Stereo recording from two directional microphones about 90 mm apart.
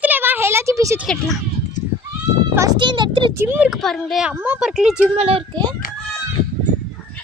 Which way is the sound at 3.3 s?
25° right (ahead or behind).